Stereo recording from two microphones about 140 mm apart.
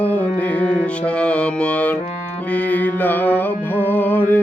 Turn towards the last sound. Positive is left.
turn(degrees=15)  # may be behind; listen again after turning